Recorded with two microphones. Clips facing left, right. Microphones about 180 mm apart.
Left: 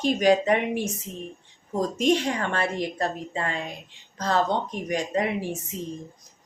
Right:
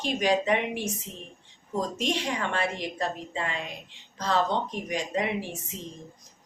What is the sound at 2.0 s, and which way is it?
A woman's voice, 45° left (ahead or behind).